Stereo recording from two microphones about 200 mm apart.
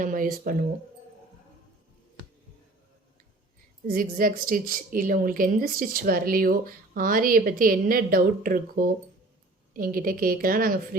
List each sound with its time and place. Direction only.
0.0 s a woman's voice: 45° right (ahead or behind)
3.8 s a woman's voice: 45° right (ahead or behind)